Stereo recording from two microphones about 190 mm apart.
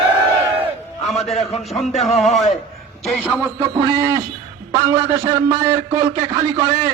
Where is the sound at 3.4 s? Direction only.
20° right (ahead or behind).